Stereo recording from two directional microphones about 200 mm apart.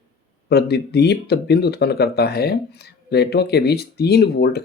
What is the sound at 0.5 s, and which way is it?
Speech, 55° left (ahead or behind).